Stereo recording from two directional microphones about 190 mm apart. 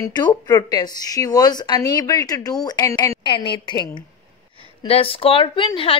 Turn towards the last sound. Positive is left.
turn(degrees=30)  # may be behind; listen again after turning